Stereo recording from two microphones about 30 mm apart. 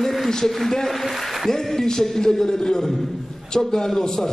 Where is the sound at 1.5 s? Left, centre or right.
Centre.